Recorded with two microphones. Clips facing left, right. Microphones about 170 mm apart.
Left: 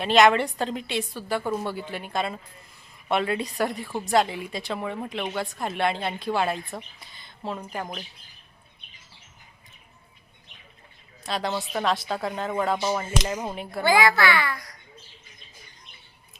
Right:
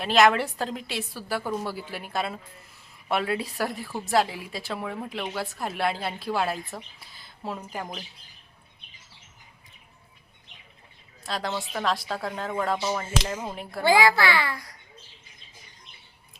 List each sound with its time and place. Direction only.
0.0 s a woman's voice: centre (ahead or behind)
11.2 s a woman's voice: centre (ahead or behind)
13.6 s a woman's voice: centre (ahead or behind)
13.8 s a child's voice: 25° right (ahead or behind)